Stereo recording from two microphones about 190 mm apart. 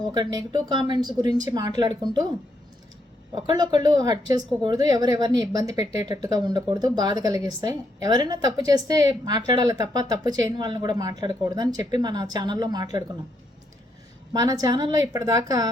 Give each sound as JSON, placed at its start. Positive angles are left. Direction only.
{"t": 0.1, "sound": "speech", "side_deg": -20}
{"t": 3.3, "sound": "speech", "side_deg": -20}
{"t": 14.3, "sound": "speech", "side_deg": -20}